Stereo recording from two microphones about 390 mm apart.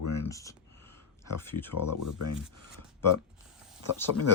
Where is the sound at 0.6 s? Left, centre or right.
Centre.